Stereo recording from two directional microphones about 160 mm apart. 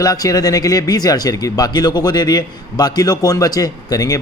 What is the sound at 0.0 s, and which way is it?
Speech, 25° left (ahead or behind).